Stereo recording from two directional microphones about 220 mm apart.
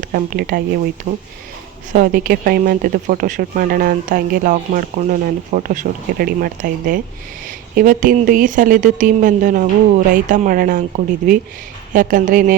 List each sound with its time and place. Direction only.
0.0 s speech: 40° right (ahead or behind)
1.9 s speech: 40° right (ahead or behind)